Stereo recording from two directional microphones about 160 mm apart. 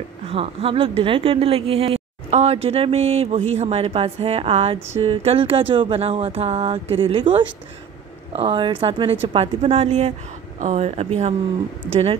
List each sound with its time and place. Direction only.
0.3 s speech: 35° right (ahead or behind)